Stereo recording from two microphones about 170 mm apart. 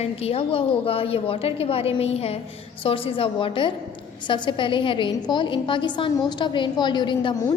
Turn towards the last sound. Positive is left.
turn(degrees=25)  # may be behind; listen again after turning